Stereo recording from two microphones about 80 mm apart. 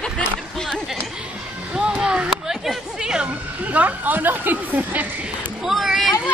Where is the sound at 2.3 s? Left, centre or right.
Centre; by 5.1 s right.